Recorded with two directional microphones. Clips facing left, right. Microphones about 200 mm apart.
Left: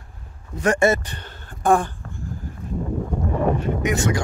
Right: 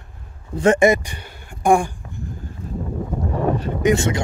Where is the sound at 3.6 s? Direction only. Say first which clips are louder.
Right 4 dB; 30° right (ahead or behind).